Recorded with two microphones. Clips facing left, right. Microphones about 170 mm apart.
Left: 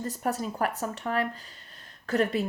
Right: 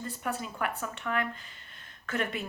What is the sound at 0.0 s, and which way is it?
A woman's voice, 40° left (ahead or behind).